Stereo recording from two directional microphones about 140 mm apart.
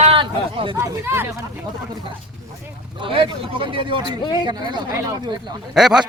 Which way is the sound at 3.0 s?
40° right (ahead or behind).